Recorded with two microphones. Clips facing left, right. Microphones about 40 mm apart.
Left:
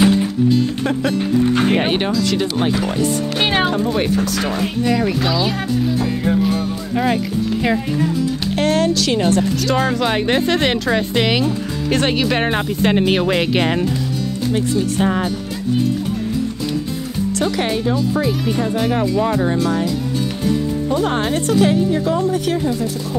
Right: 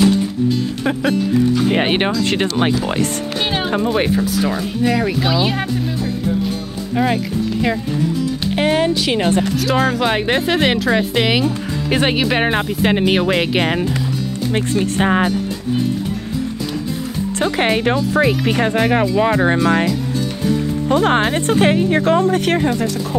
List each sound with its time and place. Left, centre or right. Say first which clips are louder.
0.8 s speech: even; centre
1.8 s speech: right 1 dB; right
3.3 s speech: left 3 dB; left
3.9 s speech: right 1 dB; centre
7.0 s speech: right 1 dB; centre
8.5 s speech: right 1 dB; centre
9.7 s speech: right 2 dB; centre
14.5 s speech: even; right
17.4 s speech: right 4 dB; right
18.1 s speech: right 3 dB; right
18.7 s speech: right 2 dB; right
20.9 s speech: right 5 dB; right
21.2 s speech: right 1 dB; right